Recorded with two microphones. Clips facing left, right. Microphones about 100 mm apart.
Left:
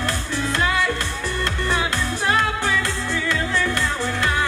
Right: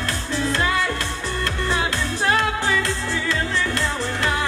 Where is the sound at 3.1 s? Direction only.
25° right (ahead or behind).